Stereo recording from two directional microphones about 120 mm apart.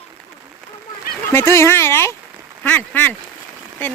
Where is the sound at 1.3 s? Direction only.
20° left (ahead or behind).